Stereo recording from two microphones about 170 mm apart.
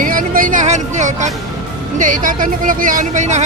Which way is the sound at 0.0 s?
55° right (ahead or behind).